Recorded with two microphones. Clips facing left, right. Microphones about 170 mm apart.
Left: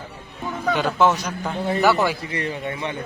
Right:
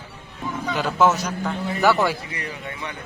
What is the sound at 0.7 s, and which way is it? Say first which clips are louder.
A man's voice: even; 5° right (ahead or behind).